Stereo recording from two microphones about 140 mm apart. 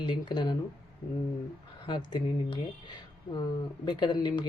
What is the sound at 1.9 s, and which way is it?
Speech, 30° left (ahead or behind).